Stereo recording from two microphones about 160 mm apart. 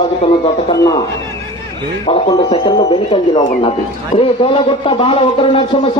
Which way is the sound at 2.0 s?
30° left (ahead or behind).